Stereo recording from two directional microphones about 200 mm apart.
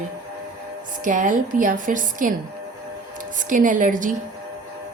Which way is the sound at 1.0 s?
40° right (ahead or behind).